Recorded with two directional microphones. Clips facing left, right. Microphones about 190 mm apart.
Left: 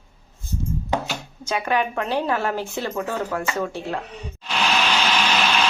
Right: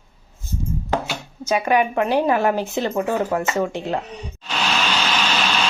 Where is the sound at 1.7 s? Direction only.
15° right (ahead or behind).